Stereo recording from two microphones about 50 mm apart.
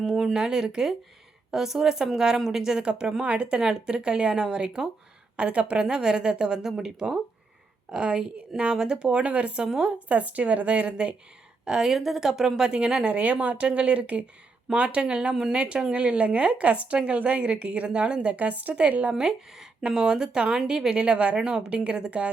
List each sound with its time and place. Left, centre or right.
0.0 s a sound: centre
0.3 s a woman's voice: centre; by 11.1 s right
11.6 s a woman's voice: centre
13.1 s a woman's voice: right
19.1 s a woman's voice: centre